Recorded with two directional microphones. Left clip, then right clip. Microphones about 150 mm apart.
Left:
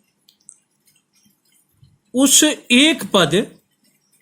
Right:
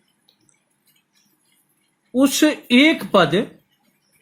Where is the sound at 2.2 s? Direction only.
55° left (ahead or behind).